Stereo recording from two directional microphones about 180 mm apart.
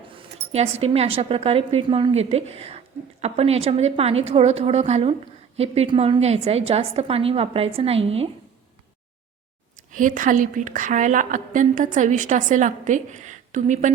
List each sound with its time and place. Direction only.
0.5 s a woman's voice: 35° right (ahead or behind)
9.7 s a woman's voice: 45° right (ahead or behind)